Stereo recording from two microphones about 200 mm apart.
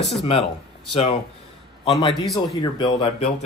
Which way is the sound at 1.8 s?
25° left (ahead or behind).